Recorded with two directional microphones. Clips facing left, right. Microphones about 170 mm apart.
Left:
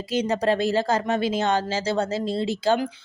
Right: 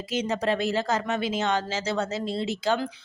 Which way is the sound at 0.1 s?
35° left (ahead or behind).